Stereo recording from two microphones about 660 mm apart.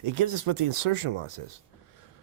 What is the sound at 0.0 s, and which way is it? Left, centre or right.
Speech, right.